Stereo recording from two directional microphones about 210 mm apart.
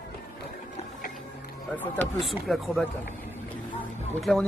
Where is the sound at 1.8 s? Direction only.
5° left (ahead or behind).